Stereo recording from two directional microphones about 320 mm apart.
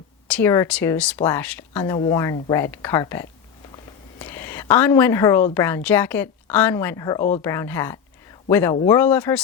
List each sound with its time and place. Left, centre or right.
0.3 s a woman's voice: centre
7.2 s speech: left
7.4 s speech: centre